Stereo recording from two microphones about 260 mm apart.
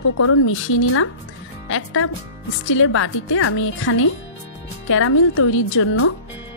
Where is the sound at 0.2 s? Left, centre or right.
Left.